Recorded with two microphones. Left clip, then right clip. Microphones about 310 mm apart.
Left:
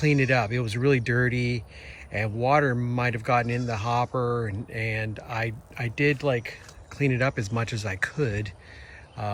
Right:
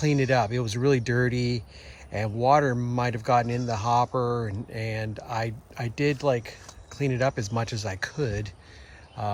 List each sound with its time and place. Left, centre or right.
0.0 s speech: centre